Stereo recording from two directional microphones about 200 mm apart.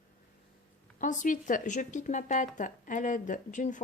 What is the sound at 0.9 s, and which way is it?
Speech, 40° left (ahead or behind).